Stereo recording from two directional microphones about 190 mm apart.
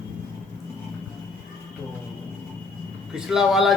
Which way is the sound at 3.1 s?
5° right (ahead or behind).